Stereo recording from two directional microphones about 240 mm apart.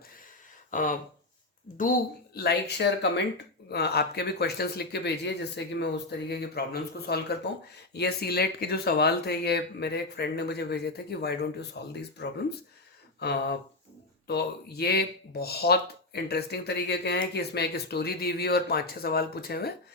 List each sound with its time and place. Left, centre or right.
0.7 s speech: left